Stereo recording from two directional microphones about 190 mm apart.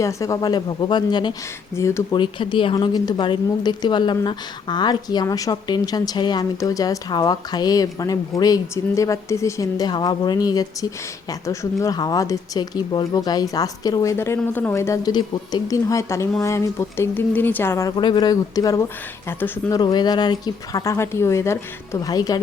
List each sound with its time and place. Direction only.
0.0 s speech: 15° left (ahead or behind)
2.1 s speech: 25° left (ahead or behind); by 19.8 s 10° left (ahead or behind)
19.8 s speech: 20° left (ahead or behind)